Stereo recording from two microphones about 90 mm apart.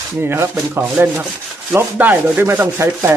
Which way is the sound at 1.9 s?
15° right (ahead or behind).